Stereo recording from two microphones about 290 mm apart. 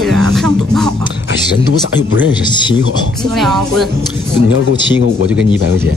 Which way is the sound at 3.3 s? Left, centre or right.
Centre.